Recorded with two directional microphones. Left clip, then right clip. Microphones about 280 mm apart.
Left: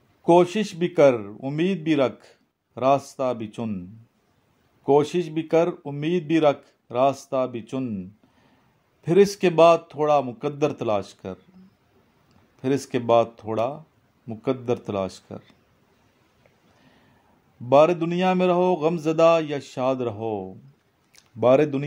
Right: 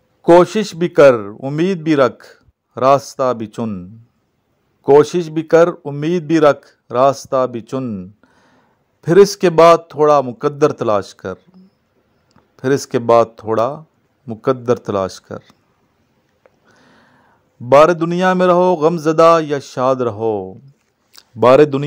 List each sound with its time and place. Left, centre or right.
0.2 s speech: right
4.8 s speech: right
12.5 s speech: right
17.6 s speech: right